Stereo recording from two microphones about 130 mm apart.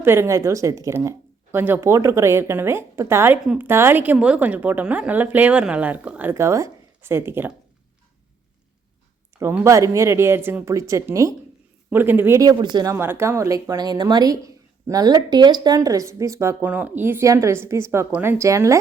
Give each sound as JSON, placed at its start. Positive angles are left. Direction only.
{"t": 0.0, "sound": "speech", "side_deg": -20}
{"t": 3.4, "sound": "a woman's voice", "side_deg": -5}
{"t": 3.7, "sound": "a woman's voice", "side_deg": -20}
{"t": 6.3, "sound": "speech", "side_deg": -25}
{"t": 9.4, "sound": "a woman's voice", "side_deg": -20}
{"t": 12.4, "sound": "speech", "side_deg": -30}